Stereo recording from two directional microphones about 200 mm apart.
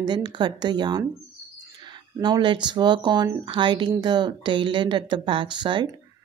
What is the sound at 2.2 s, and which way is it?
Speech, 20° right (ahead or behind).